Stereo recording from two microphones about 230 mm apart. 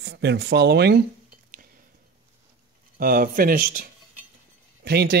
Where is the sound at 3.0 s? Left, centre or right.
Right.